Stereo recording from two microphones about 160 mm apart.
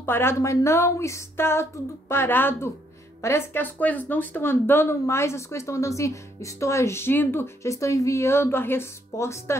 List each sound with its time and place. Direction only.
0.0 s speech: 15° left (ahead or behind)